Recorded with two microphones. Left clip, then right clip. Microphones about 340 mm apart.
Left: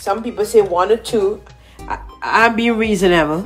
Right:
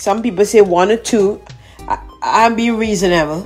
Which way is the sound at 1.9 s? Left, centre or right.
Centre.